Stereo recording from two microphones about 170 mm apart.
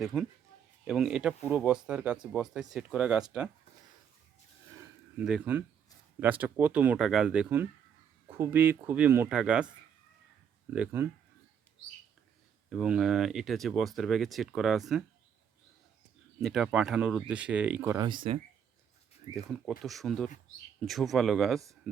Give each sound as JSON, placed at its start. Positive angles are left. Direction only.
{"t": 0.0, "sound": "speech", "side_deg": 0}
{"t": 5.2, "sound": "speech", "side_deg": -5}
{"t": 10.8, "sound": "speech", "side_deg": -15}
{"t": 12.7, "sound": "speech", "side_deg": -5}
{"t": 16.4, "sound": "speech", "side_deg": 0}
{"t": 17.9, "sound": "speech", "side_deg": -25}
{"t": 19.8, "sound": "speech", "side_deg": 0}